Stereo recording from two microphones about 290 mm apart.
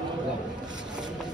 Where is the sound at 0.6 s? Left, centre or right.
Centre.